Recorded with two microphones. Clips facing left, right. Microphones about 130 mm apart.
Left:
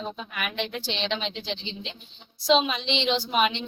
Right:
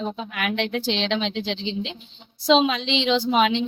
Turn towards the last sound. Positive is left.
turn(degrees=-90)